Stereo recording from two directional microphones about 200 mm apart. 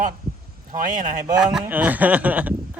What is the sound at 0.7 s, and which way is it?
Speech, 40° right (ahead or behind).